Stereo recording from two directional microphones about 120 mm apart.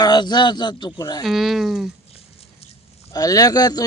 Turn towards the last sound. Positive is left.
turn(degrees=30)  # may be behind; listen again after turning